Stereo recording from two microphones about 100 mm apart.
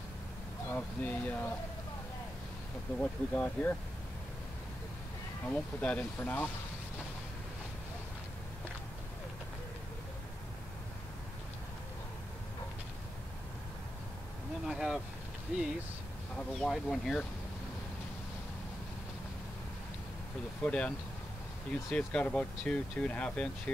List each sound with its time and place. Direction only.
0.7 s speech: 15° left (ahead or behind)
3.0 s speech: 20° left (ahead or behind)
5.5 s speech: 10° left (ahead or behind)
14.7 s vehicle: 5° right (ahead or behind)
15.5 s speech: 10° right (ahead or behind)
16.3 s speech: 5° left (ahead or behind)
20.6 s speech: 10° left (ahead or behind)
21.9 s speech: 10° left (ahead or behind)